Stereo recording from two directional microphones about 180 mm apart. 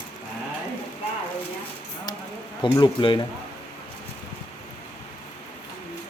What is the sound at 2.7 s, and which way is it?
Speech, 25° left (ahead or behind).